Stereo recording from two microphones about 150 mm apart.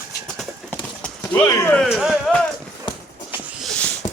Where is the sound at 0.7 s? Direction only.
5° left (ahead or behind).